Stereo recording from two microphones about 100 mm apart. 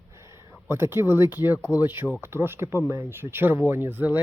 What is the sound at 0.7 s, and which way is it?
Speech, 25° right (ahead or behind).